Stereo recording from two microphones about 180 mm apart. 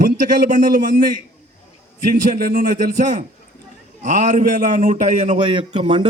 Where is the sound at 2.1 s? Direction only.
50° right (ahead or behind).